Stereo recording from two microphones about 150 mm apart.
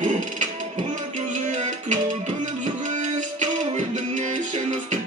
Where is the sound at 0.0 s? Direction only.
55° right (ahead or behind).